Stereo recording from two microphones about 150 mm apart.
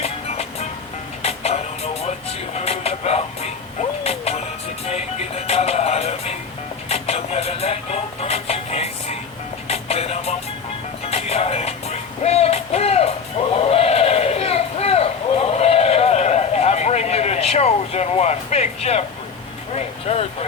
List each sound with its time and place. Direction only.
0.0 s music: 45° left (ahead or behind)
19.7 s vehicle: 45° left (ahead or behind)